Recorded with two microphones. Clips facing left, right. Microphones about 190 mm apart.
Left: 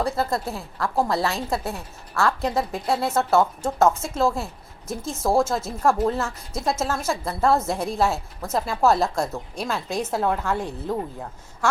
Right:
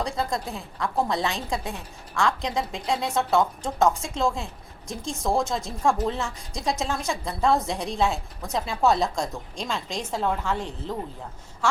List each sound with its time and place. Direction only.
0.0 s a woman's voice: 5° left (ahead or behind)